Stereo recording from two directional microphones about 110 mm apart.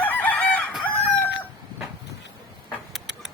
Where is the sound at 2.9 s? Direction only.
5° right (ahead or behind).